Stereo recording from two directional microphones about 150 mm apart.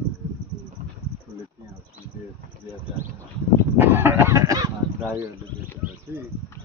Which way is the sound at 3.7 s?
15° right (ahead or behind).